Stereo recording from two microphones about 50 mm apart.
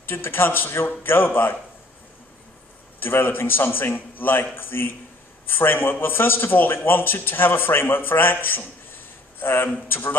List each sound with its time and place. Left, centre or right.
0.0 s a man's voice: left
3.0 s a man's voice: left